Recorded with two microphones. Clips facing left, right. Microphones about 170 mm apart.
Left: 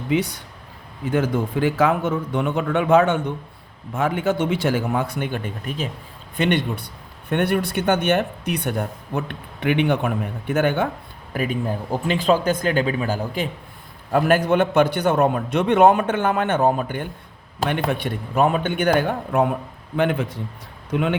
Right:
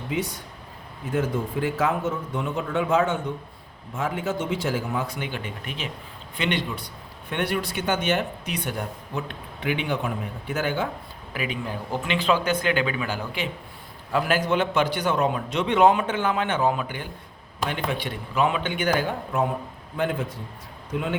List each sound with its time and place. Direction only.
1.1 s a man's voice: 75° left (ahead or behind); by 5.9 s 40° left (ahead or behind)
6.3 s a man's voice: 55° left (ahead or behind)
11.3 s a man's voice: 45° left (ahead or behind)
17.7 s speech: 60° left (ahead or behind)
20.0 s a man's voice: 70° left (ahead or behind)